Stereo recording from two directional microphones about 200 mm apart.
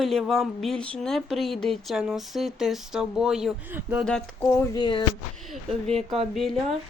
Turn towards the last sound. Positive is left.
turn(degrees=0)  # may be behind; listen again after turning